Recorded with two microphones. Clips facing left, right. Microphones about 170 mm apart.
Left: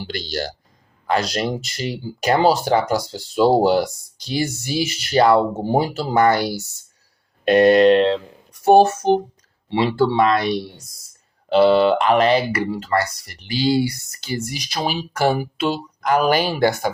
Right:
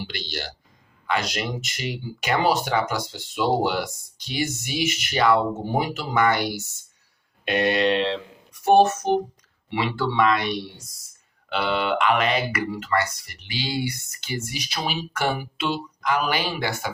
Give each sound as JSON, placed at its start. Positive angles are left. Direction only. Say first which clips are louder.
{"t": 0.1, "sound": "speech", "louder": "left 7 dB", "side_deg": 40}
{"t": 8.6, "sound": "speech", "louder": "left 4 dB", "side_deg": 35}